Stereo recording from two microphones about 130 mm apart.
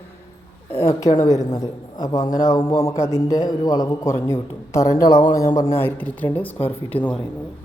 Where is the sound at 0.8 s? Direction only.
25° left (ahead or behind).